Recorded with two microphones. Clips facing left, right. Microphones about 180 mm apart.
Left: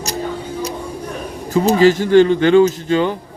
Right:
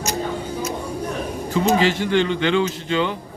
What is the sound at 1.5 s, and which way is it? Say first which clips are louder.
Speech: left 6 dB; 40° left (ahead or behind).